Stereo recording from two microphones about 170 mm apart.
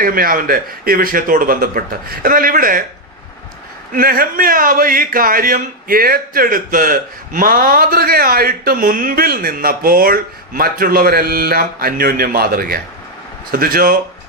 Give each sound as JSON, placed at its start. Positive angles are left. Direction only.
{"t": 0.0, "sound": "a man's voice", "side_deg": -55}
{"t": 3.9, "sound": "a man's voice", "side_deg": -60}